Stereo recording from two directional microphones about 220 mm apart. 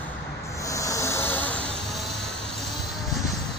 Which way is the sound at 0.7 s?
15° left (ahead or behind).